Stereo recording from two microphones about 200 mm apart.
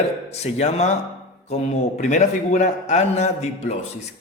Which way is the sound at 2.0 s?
35° left (ahead or behind).